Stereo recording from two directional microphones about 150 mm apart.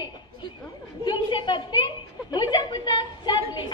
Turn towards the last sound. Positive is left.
turn(degrees=30)  # may be behind; listen again after turning